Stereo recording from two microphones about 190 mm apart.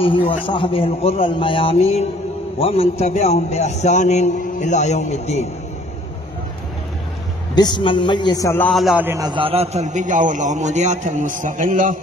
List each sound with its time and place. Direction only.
0.0 s a man's voice: 25° left (ahead or behind)
7.5 s a man's voice: 25° left (ahead or behind); by 12.0 s 45° right (ahead or behind)